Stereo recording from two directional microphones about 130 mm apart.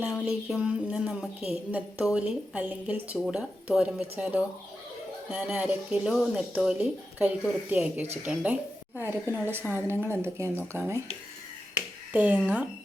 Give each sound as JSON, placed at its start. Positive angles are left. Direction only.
{"t": 0.0, "sound": "music", "side_deg": -5}
{"t": 1.7, "sound": "a woman's voice", "side_deg": -5}
{"t": 12.1, "sound": "a woman's voice", "side_deg": -10}